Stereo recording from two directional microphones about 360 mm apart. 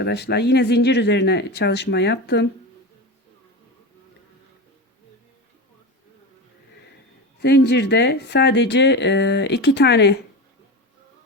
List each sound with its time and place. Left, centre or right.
0.0 s a woman's voice: left
7.3 s a woman's voice: left